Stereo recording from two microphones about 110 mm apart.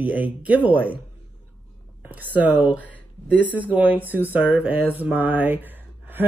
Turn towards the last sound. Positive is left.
turn(degrees=-15)  # may be behind; listen again after turning